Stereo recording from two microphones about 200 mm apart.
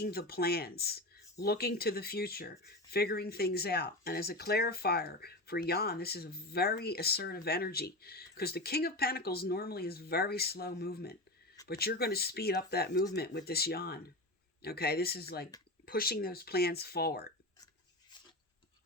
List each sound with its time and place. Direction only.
0.0 s speech: 50° left (ahead or behind)